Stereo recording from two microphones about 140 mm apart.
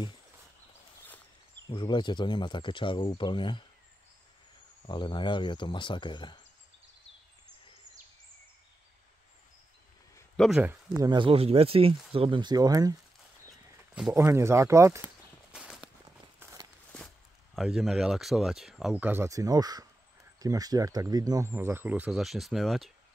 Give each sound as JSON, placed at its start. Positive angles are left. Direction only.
{"t": 1.7, "sound": "speech", "side_deg": 35}
{"t": 4.8, "sound": "speech", "side_deg": 35}
{"t": 10.3, "sound": "speech", "side_deg": 0}
{"t": 11.0, "sound": "speech", "side_deg": -35}
{"t": 14.1, "sound": "speech", "side_deg": -20}
{"t": 15.5, "sound": "walk", "side_deg": -5}
{"t": 17.6, "sound": "speech", "side_deg": 0}
{"t": 19.0, "sound": "speech", "side_deg": -20}
{"t": 22.2, "sound": "speech", "side_deg": 0}